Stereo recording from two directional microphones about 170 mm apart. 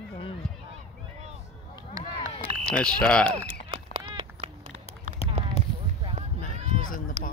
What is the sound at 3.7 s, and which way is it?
Clip-clop, 35° right (ahead or behind).